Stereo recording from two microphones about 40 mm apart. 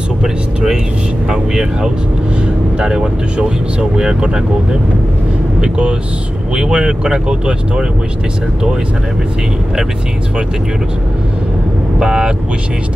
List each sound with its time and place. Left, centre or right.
1.3 s speech: centre
5.6 s speech: right
12.0 s speech: centre